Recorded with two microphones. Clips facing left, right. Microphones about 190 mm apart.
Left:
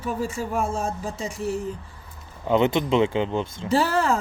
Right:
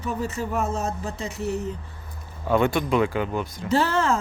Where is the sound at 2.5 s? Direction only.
20° left (ahead or behind).